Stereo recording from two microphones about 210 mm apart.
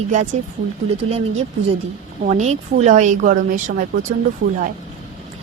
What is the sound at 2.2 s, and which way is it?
A woman's voice, 35° right (ahead or behind).